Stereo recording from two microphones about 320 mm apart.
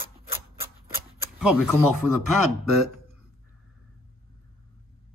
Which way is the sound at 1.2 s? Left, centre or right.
Centre.